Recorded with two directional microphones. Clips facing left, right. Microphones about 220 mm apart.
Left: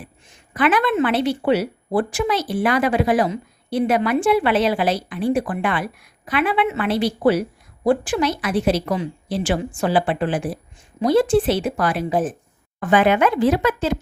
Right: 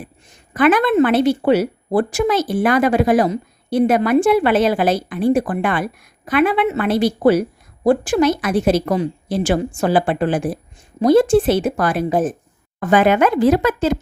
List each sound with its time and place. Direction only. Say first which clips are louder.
0.0 s a woman's voice: right 4 dB; 45° right (ahead or behind)